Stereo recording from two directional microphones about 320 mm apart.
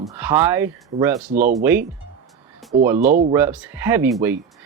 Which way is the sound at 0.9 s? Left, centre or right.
Right.